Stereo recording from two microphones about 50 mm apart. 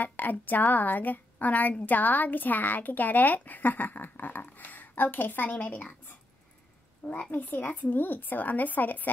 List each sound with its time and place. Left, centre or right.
0.0 s a woman's voice: left
7.1 s a woman's voice: left